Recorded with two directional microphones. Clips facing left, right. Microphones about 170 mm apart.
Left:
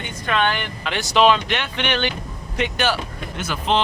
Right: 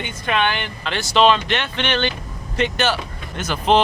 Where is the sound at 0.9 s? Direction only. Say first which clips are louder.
Even; 15° left (ahead or behind).